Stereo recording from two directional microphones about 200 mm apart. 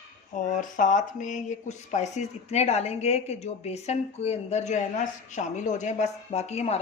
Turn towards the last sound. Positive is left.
turn(degrees=30)  # may be behind; listen again after turning